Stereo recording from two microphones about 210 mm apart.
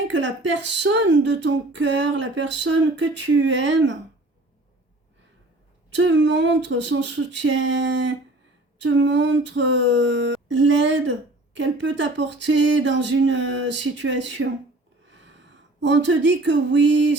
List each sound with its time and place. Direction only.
0.1 s speech: 60° right (ahead or behind)
5.9 s speech: 60° right (ahead or behind)
15.1 s a sound: 60° right (ahead or behind)